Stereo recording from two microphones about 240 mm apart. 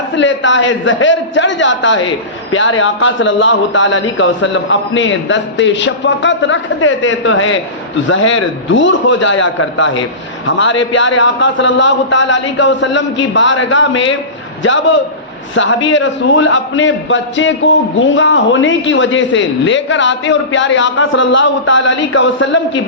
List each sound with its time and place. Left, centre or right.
0.2 s a man's voice: left